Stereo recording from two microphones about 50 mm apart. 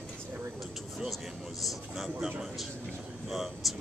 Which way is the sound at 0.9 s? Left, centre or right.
Centre.